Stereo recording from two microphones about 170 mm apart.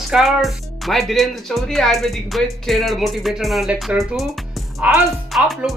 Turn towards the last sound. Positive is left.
turn(degrees=0)  # may be behind; listen again after turning